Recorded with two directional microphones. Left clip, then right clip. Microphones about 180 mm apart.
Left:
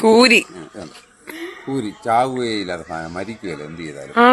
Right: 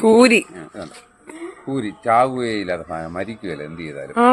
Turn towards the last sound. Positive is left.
turn(degrees=0)  # may be behind; listen again after turning